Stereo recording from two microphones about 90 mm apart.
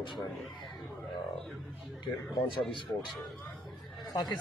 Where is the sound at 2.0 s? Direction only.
65° left (ahead or behind).